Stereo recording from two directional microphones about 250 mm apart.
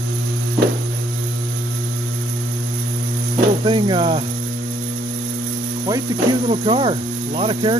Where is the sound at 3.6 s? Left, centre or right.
Centre.